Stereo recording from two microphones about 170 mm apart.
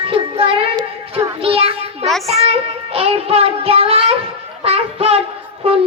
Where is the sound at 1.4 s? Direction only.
35° right (ahead or behind).